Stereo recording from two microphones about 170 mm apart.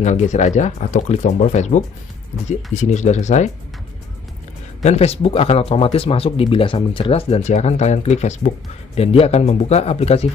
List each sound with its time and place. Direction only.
0.0 s speech: 45° left (ahead or behind)
4.8 s speech: 40° left (ahead or behind)